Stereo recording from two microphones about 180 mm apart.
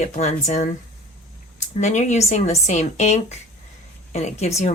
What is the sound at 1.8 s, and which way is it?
Speech, 40° left (ahead or behind).